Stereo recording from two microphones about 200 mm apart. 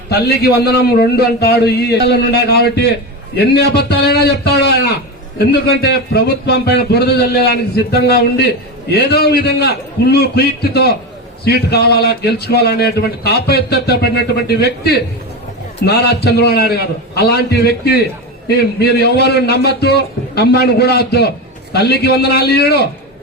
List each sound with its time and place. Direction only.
0.1 s a man's voice: 55° left (ahead or behind)